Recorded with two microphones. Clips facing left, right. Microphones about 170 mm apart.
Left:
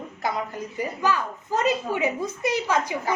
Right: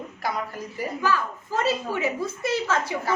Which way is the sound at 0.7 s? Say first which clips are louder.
Even; 20° left (ahead or behind).